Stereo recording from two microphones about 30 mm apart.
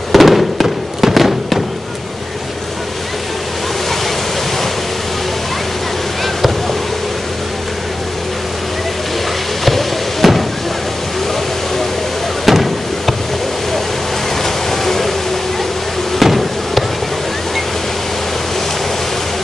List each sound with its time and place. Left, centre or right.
0.1 s fireworks: centre
6.2 s boat: centre
9.7 s music: centre
12.4 s a sound: centre
14.4 s a sound: centre
16.2 s hammer: centre